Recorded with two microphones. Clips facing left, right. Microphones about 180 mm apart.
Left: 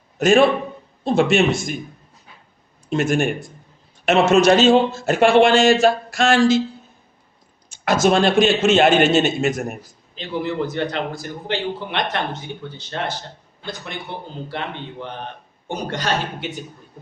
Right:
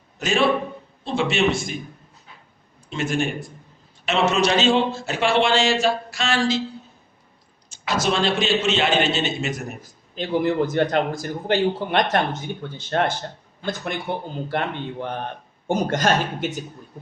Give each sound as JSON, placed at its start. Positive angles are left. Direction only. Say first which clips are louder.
{"t": 0.2, "sound": "a man's voice", "louder": "left 6 dB", "side_deg": 50}
{"t": 2.9, "sound": "a man's voice", "louder": "left 5 dB", "side_deg": 50}
{"t": 7.7, "sound": "a man's voice", "louder": "left 6 dB", "side_deg": 50}
{"t": 10.2, "sound": "a man's voice", "louder": "right 3 dB", "side_deg": -50}